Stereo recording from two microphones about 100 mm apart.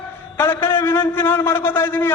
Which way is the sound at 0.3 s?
20° left (ahead or behind).